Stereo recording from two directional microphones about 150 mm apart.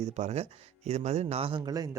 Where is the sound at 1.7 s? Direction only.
25° right (ahead or behind).